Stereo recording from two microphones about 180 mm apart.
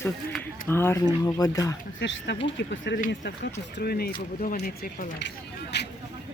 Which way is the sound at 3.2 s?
75° left (ahead or behind).